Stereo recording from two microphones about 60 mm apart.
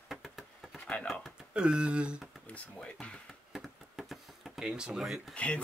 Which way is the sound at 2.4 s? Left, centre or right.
Left.